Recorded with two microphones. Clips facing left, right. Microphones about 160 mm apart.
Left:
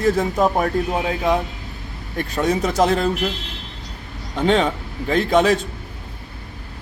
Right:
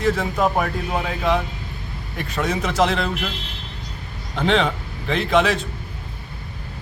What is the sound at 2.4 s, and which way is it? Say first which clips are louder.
Speech: left 3 dB; 40° left (ahead or behind).